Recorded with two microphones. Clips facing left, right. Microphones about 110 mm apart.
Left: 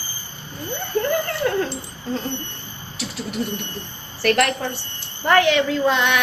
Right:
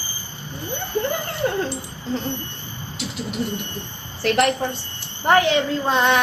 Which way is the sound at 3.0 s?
20° right (ahead or behind).